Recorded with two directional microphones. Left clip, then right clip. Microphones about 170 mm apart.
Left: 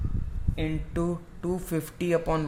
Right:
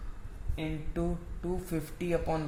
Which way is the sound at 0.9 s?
50° left (ahead or behind).